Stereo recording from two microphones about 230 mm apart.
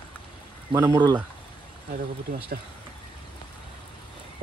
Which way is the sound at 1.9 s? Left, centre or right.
Right.